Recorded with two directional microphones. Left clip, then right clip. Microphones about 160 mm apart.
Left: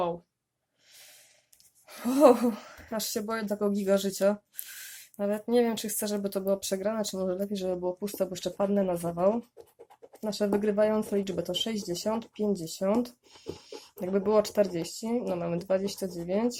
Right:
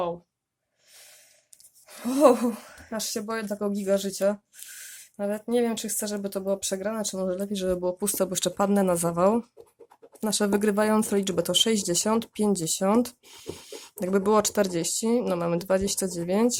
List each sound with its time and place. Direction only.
1.9 s speech: centre (ahead or behind); by 7.5 s 15° right (ahead or behind)
7.5 s speech: 30° right (ahead or behind)